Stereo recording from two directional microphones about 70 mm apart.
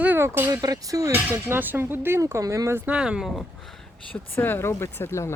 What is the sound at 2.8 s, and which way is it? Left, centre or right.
Speech, centre.